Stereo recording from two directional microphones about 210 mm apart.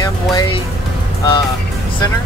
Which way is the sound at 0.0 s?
20° left (ahead or behind).